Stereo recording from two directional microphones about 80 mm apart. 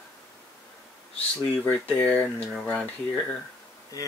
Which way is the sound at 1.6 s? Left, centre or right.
Centre.